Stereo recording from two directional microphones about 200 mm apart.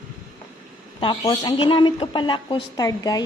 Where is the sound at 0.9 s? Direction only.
20° left (ahead or behind).